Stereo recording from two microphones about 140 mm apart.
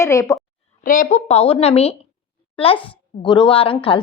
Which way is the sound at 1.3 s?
45° left (ahead or behind).